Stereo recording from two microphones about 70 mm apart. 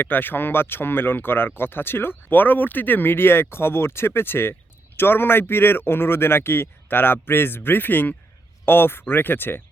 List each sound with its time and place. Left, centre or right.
0.0 s speech: left